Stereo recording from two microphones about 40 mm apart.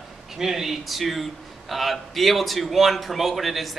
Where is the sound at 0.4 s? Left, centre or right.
Centre.